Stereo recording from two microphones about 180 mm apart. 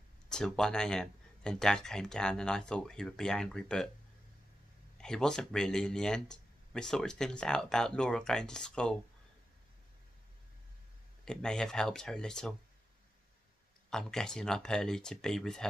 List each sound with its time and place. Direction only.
0.3 s speech: 5° left (ahead or behind)
4.9 s speech: 5° left (ahead or behind)
11.2 s speech: 5° left (ahead or behind)
13.8 s speech: 5° left (ahead or behind)